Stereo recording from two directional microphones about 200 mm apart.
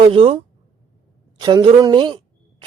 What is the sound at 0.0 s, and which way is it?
Speech, 25° right (ahead or behind).